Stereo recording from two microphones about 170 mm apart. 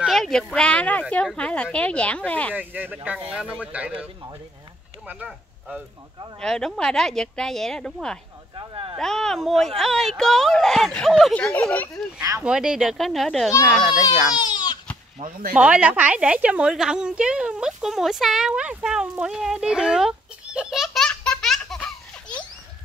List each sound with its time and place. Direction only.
0.0 s speech: centre (ahead or behind)
2.5 s speech: 10° right (ahead or behind)
5.0 s speech: 10° right (ahead or behind)
6.4 s speech: 5° left (ahead or behind)
8.5 s speech: 30° right (ahead or behind)
8.9 s speech: 5° left (ahead or behind)
12.2 s speech: 20° right (ahead or behind)
12.4 s speech: 5° right (ahead or behind)
14.3 s baby cry: 25° left (ahead or behind)
15.5 s a woman's voice: 5° right (ahead or behind)